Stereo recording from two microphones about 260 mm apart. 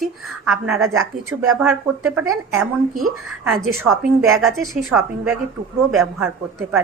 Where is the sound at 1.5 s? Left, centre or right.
Centre.